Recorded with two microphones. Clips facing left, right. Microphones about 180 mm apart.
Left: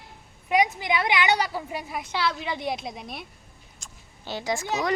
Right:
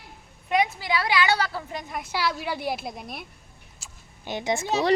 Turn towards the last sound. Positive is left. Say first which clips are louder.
# right 3 dB
turn(degrees=-30)  # may be behind; listen again after turning